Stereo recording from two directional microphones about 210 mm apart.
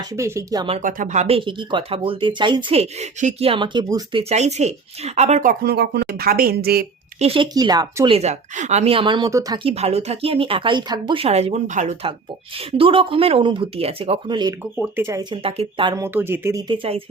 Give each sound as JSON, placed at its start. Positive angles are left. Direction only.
{"t": 0.1, "sound": "speech", "side_deg": -15}
{"t": 0.8, "sound": "speech", "side_deg": -40}
{"t": 4.2, "sound": "speech", "side_deg": -30}
{"t": 7.2, "sound": "speech", "side_deg": -25}
{"t": 9.7, "sound": "speech", "side_deg": -30}
{"t": 14.8, "sound": "speech", "side_deg": -10}
{"t": 16.0, "sound": "speech", "side_deg": -10}